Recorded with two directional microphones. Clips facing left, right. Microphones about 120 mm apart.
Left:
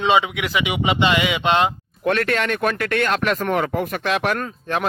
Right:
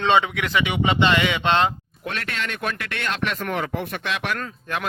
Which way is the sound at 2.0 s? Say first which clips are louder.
Left 10 dB; 50° left (ahead or behind).